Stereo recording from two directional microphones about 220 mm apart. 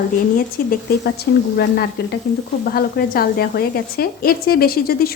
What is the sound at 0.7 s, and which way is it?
Speech, 45° left (ahead or behind).